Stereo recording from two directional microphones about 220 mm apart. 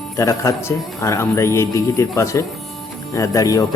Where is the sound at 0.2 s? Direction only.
15° left (ahead or behind).